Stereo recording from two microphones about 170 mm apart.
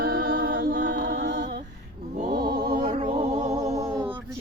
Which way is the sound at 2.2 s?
60° right (ahead or behind).